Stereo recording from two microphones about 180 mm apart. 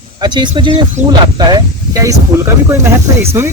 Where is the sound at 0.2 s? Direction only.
25° right (ahead or behind).